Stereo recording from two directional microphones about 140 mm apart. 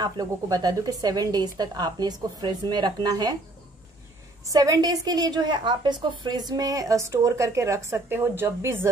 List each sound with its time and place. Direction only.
0.0 s a woman's voice: 30° right (ahead or behind)
4.5 s a woman's voice: 25° right (ahead or behind)